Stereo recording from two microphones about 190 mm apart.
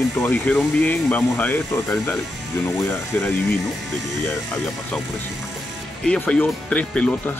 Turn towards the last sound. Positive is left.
turn(degrees=5)  # may be behind; listen again after turning